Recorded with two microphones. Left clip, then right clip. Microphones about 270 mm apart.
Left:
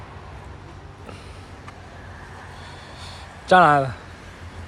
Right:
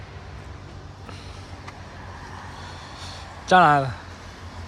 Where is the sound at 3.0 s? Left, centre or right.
Centre.